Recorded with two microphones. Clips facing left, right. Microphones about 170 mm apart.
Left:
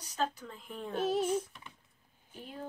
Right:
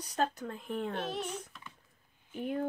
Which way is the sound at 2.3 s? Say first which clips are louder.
Right 10 dB; 60° right (ahead or behind).